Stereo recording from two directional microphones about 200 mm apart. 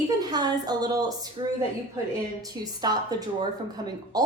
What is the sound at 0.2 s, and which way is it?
A woman's voice, 20° right (ahead or behind).